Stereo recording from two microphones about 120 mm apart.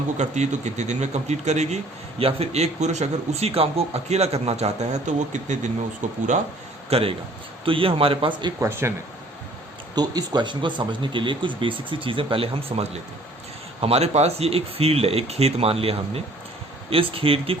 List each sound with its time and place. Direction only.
0.2 s a man's voice: 75° right (ahead or behind)
6.9 s speech: 50° right (ahead or behind)
8.5 s speech: 20° right (ahead or behind)
9.9 s speech: 35° right (ahead or behind); by 12.8 s 50° right (ahead or behind)
13.8 s speech: 60° right (ahead or behind)